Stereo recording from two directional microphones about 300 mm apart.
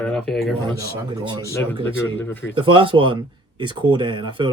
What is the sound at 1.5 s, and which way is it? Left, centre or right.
Speech, centre.